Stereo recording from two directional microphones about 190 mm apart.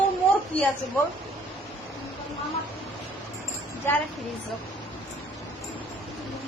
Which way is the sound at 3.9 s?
10° left (ahead or behind).